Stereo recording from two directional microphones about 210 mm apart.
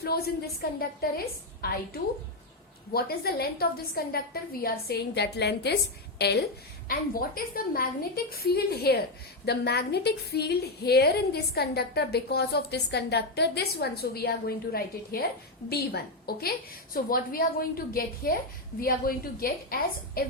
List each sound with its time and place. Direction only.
0.0 s a woman's voice: 50° left (ahead or behind)